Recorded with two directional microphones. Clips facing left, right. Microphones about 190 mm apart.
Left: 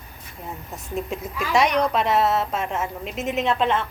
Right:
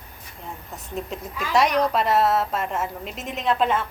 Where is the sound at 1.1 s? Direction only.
Centre (ahead or behind).